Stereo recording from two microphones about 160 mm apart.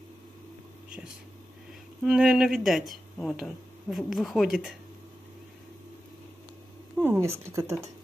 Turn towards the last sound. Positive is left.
turn(degrees=-20)  # may be behind; listen again after turning